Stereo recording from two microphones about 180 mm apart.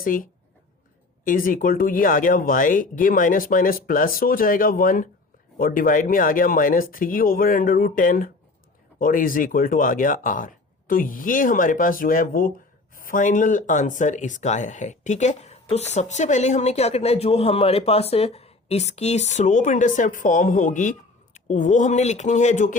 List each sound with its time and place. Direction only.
0.0 s speech: 50° left (ahead or behind)